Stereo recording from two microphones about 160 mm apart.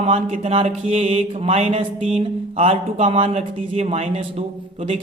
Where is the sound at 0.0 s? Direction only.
40° right (ahead or behind).